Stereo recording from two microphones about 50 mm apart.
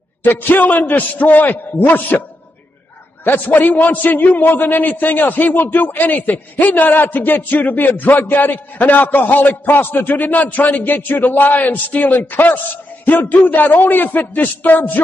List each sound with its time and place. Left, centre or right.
0.2 s a man's voice: left
3.3 s a man's voice: left